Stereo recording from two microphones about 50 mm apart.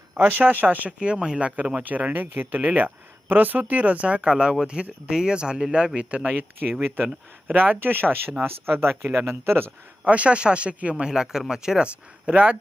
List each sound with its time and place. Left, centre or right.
0.2 s speech: right
0.9 s speech: centre
6.3 s speech: right
10.0 s speech: right
11.0 s speech: centre
12.2 s speech: right